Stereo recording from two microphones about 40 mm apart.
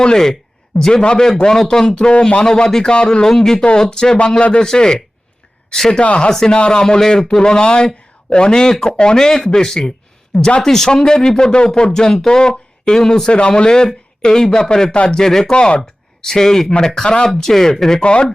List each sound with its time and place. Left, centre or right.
0.0 s a man's voice: centre
5.9 s a man's voice: left
15.5 s a man's voice: left
15.8 s speech: centre
18.0 s a man's voice: left